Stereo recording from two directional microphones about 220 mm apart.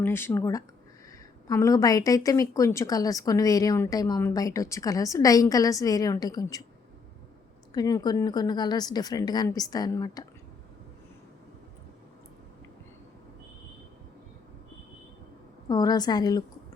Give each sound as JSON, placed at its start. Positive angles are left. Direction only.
{"t": 0.0, "sound": "a woman's voice", "side_deg": 10}
{"t": 7.7, "sound": "a woman's voice", "side_deg": 15}
{"t": 15.7, "sound": "a woman's voice", "side_deg": 20}